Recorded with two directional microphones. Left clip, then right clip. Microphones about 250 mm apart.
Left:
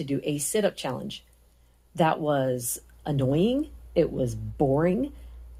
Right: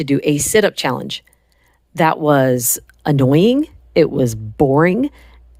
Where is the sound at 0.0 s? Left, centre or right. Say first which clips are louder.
Right 13 dB; right.